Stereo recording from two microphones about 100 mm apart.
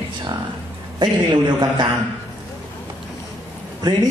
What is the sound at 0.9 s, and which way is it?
Speech, 45° right (ahead or behind).